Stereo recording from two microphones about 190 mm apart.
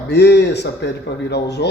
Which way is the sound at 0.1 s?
65° left (ahead or behind).